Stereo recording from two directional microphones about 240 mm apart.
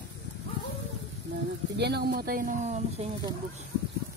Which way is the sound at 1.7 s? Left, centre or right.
Right.